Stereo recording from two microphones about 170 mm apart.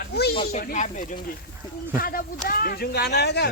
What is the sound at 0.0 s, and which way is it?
Snake, 70° left (ahead or behind).